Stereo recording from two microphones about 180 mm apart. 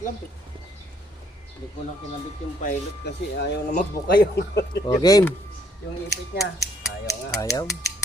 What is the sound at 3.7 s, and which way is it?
Speech, 50° left (ahead or behind).